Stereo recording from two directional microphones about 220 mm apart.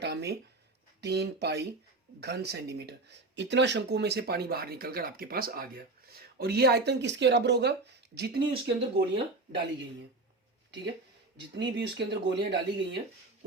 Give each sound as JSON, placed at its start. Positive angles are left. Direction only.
{"t": 0.0, "sound": "a sound", "side_deg": -50}
{"t": 1.0, "sound": "speech", "side_deg": -50}
{"t": 11.3, "sound": "speech", "side_deg": -55}